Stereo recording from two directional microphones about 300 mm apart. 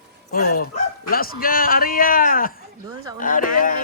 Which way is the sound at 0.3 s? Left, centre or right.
Left.